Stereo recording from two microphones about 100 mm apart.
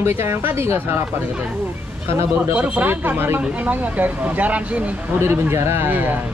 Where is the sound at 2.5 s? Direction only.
15° right (ahead or behind).